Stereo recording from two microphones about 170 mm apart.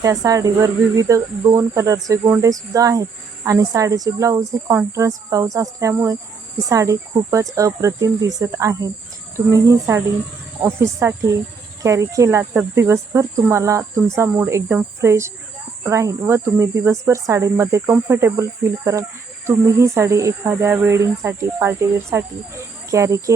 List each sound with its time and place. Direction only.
0.0 s speech: 20° right (ahead or behind)